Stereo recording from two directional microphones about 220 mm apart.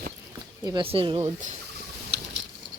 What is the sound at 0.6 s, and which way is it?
Speech, 20° right (ahead or behind).